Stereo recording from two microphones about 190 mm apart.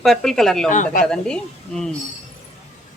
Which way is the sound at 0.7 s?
40° left (ahead or behind).